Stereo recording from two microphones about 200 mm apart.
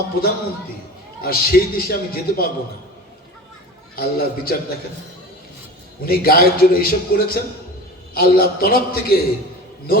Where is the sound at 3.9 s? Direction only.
50° left (ahead or behind).